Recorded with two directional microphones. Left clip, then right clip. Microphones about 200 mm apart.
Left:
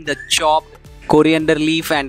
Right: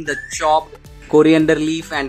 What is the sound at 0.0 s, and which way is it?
Speech, 45° left (ahead or behind).